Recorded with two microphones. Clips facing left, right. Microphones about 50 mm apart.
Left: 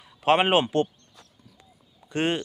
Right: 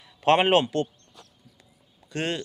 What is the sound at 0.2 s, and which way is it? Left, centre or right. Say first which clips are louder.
Speech: right 1 dB; centre.